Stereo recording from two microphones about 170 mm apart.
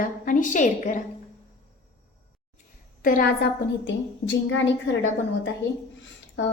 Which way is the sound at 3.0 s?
55° left (ahead or behind).